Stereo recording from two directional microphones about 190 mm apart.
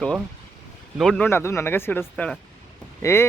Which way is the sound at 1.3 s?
15° left (ahead or behind).